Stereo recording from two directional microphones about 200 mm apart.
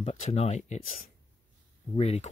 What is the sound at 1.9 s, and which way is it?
Speech, 30° left (ahead or behind).